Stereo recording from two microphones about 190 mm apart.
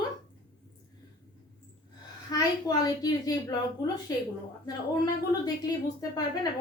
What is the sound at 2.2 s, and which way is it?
A woman's voice, 20° left (ahead or behind).